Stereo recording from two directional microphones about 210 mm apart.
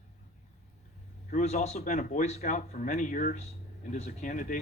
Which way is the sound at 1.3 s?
35° left (ahead or behind).